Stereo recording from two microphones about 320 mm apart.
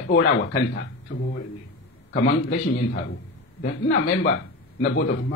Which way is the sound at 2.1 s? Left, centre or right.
Left.